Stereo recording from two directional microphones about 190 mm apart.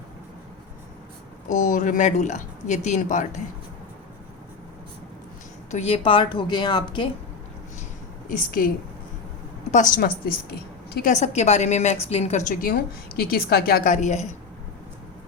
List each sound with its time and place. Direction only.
1.5 s speech: 40° left (ahead or behind)
5.7 s a woman's voice: 30° left (ahead or behind)
8.3 s a woman's voice: 45° left (ahead or behind)
9.7 s a woman's voice: 45° left (ahead or behind)
12.5 s a woman's voice: 55° left (ahead or behind); by 14.3 s 35° left (ahead or behind)